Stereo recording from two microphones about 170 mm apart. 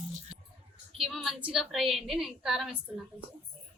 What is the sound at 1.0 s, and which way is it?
A woman's voice, centre (ahead or behind).